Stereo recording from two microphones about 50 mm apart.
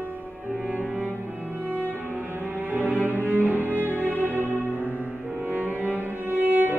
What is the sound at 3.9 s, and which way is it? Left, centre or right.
Music, left.